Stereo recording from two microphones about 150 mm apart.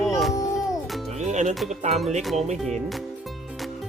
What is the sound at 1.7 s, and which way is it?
Speech, 50° right (ahead or behind).